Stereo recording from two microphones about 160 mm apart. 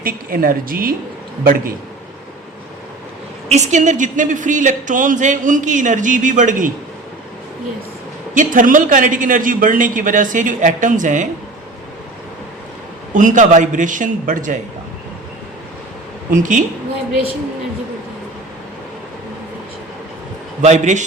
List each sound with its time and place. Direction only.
0.0 s a man's voice: 65° right (ahead or behind)
3.5 s speech: 45° right (ahead or behind)
8.4 s a man's voice: 55° right (ahead or behind)
13.1 s speech: 55° right (ahead or behind)
16.3 s speech: 55° right (ahead or behind)
20.6 s speech: 45° right (ahead or behind)